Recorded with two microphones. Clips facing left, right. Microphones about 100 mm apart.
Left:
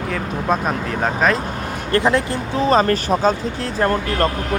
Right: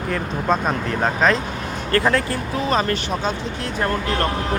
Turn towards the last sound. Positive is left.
turn(degrees=40)  # may be behind; listen again after turning